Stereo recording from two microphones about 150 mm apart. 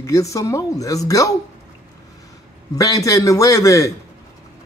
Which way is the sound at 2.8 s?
25° left (ahead or behind).